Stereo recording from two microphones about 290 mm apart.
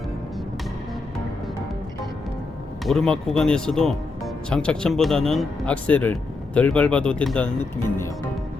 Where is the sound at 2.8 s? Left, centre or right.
Centre.